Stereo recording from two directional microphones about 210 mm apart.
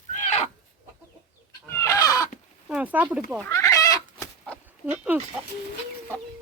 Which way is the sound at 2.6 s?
5° right (ahead or behind).